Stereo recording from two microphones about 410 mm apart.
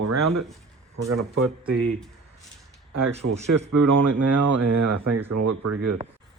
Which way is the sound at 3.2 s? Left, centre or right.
Right.